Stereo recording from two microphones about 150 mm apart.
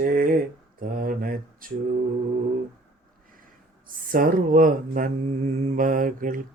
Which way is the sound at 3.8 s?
70° right (ahead or behind).